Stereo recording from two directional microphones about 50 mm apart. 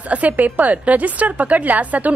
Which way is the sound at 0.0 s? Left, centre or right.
Right.